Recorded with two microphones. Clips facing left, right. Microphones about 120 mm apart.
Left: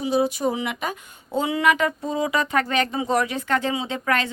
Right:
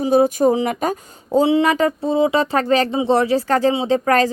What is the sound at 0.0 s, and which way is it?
Speech, 50° right (ahead or behind).